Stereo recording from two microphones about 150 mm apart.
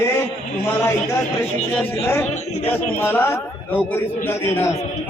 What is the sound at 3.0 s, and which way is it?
Speech, 15° left (ahead or behind).